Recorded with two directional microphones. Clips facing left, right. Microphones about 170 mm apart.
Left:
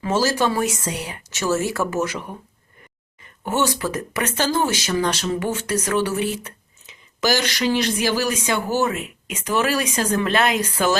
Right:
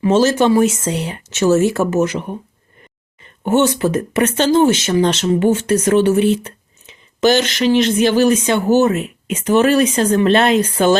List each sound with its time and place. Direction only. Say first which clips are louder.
0.0 s speech: right 7 dB; 25° right (ahead or behind)
3.4 s speech: right 8 dB; 25° right (ahead or behind)